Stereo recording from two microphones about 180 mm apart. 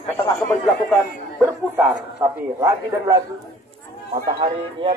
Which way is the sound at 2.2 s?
15° right (ahead or behind).